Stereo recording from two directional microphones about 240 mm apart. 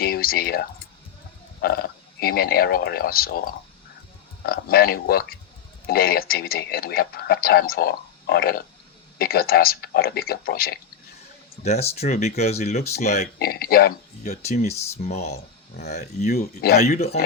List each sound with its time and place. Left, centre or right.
0.0 s a sound: left
1.6 s a man's voice: left
11.6 s a man's voice: left
14.4 s speech: left
16.6 s a man's voice: left